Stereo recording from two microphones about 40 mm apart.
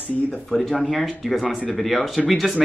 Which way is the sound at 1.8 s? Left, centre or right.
Centre.